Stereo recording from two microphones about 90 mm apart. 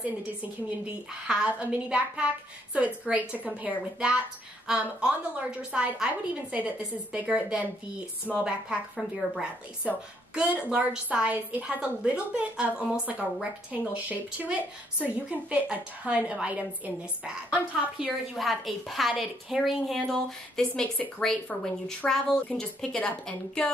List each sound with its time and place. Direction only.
1.2 s a woman's voice: 10° right (ahead or behind); by 23.7 s 10° left (ahead or behind)